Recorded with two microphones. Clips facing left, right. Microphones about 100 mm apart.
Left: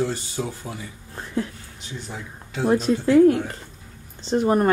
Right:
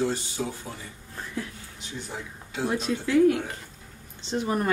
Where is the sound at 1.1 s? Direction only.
30° left (ahead or behind).